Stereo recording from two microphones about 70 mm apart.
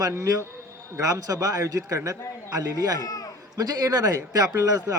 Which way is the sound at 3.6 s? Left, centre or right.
Right.